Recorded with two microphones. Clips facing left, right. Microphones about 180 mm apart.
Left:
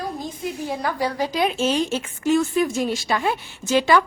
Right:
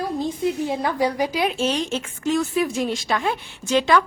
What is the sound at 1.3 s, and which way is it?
A woman's voice, centre (ahead or behind).